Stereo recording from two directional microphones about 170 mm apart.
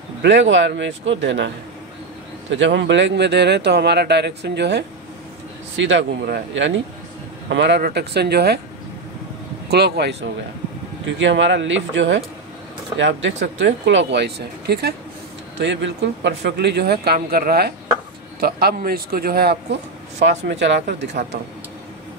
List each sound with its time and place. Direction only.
0.2 s speech: 90° right
2.5 s speech: 90° right
7.4 s speech: 90° right; by 8.5 s 75° right (ahead or behind)
9.7 s speech: 75° right (ahead or behind)
11.1 s speech: 90° right; by 15.0 s 75° right (ahead or behind)
15.6 s a man's voice: 90° right; by 19.6 s 65° right (ahead or behind)
20.2 s speech: 90° right